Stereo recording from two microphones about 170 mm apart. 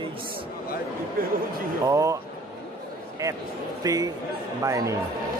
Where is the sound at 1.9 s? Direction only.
20° right (ahead or behind).